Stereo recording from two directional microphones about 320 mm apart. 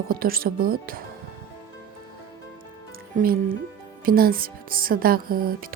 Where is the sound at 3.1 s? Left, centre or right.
Right.